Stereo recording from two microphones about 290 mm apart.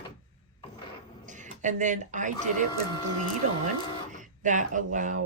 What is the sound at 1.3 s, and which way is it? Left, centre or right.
Speech, right.